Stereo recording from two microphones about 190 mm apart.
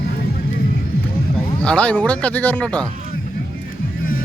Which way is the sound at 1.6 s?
5° left (ahead or behind).